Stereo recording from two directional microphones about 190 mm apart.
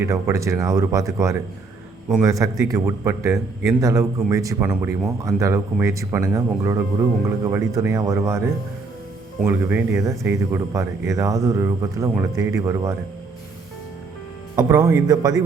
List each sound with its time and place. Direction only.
0.0 s speech: 15° right (ahead or behind)
14.5 s a man's voice: 15° right (ahead or behind)